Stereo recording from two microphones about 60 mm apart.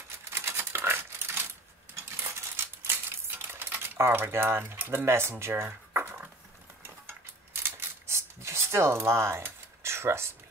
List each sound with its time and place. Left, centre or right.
0.3 s typewriter: right
2.1 s a sound: right
4.0 s speech: right
7.1 s cutlery: right